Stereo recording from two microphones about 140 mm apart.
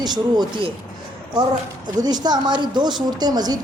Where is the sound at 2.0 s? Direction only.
30° right (ahead or behind).